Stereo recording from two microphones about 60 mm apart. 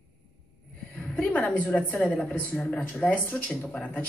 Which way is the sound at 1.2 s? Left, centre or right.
Left.